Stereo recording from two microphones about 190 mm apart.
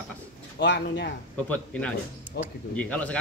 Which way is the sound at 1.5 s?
5° left (ahead or behind).